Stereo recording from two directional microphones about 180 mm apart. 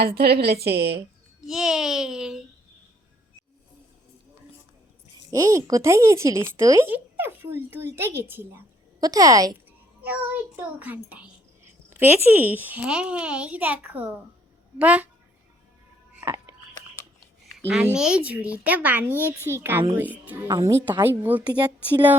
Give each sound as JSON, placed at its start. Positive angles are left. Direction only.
{"t": 0.0, "sound": "a woman's voice", "side_deg": -60}
{"t": 1.5, "sound": "a child's voice", "side_deg": 0}
{"t": 5.3, "sound": "speech", "side_deg": -20}
{"t": 10.0, "sound": "speech", "side_deg": -10}
{"t": 17.9, "sound": "speech", "side_deg": -5}